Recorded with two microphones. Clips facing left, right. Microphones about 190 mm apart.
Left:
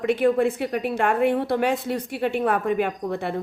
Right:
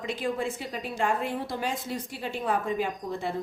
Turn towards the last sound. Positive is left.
turn(degrees=65)  # may be behind; listen again after turning